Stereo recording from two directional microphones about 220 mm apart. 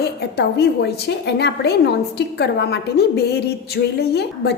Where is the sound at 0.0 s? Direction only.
50° left (ahead or behind).